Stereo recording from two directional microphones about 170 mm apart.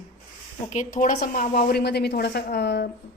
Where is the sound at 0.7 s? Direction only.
50° left (ahead or behind).